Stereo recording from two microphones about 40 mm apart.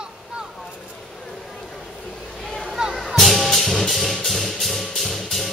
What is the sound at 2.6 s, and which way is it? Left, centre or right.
Music, centre.